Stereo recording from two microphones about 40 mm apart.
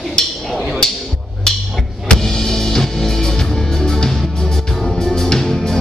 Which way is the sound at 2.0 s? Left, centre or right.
Centre.